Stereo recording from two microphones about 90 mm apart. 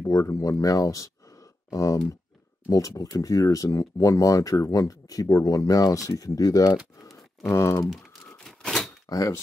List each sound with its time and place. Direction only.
0.0 s speech: 35° left (ahead or behind)
7.4 s speech: 30° left (ahead or behind)
8.5 s typewriter: 5° left (ahead or behind)
9.1 s speech: 40° left (ahead or behind)